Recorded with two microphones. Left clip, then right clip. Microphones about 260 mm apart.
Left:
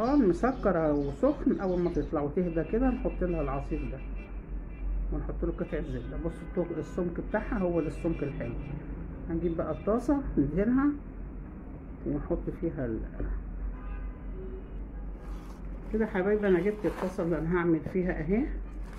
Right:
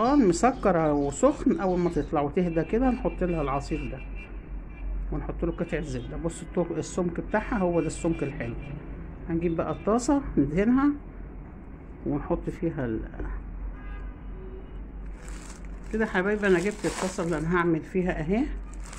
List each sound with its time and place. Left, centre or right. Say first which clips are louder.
0.0 s a woman's voice: right 4 dB; right
5.2 s speech: right 4 dB; right
9.3 s speech: right 4 dB; right
12.3 s speech: right 3 dB; right
16.0 s speech: right 2 dB; right